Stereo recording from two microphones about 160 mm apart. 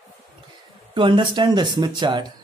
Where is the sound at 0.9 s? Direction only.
30° right (ahead or behind).